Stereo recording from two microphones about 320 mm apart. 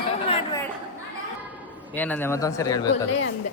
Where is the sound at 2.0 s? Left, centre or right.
Centre.